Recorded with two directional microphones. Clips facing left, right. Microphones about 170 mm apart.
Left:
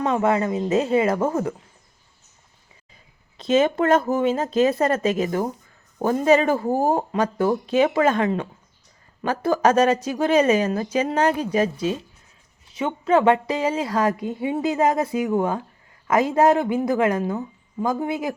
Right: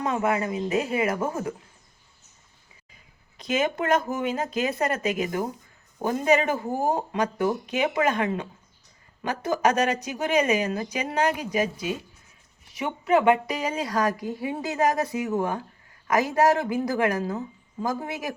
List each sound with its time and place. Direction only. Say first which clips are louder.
0.0 s a woman's voice: left 5 dB; 30° left (ahead or behind)
3.3 s speech: left 7 dB; 30° left (ahead or behind)
9.6 s a woman's voice: left 5 dB; 30° left (ahead or behind)